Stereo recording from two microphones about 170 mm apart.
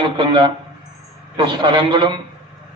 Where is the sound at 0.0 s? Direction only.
30° right (ahead or behind).